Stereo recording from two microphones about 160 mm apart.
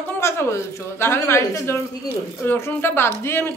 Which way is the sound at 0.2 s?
15° left (ahead or behind).